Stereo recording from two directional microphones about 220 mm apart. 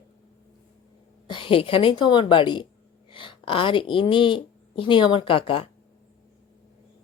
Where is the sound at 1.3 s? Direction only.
25° left (ahead or behind).